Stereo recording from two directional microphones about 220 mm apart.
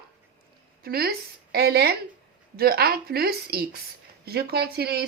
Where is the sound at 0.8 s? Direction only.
45° right (ahead or behind).